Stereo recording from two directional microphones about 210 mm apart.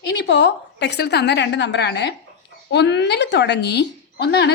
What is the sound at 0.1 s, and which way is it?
Speech, 55° left (ahead or behind).